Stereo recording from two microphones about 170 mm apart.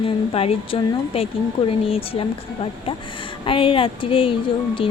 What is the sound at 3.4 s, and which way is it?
A woman's voice, 30° left (ahead or behind).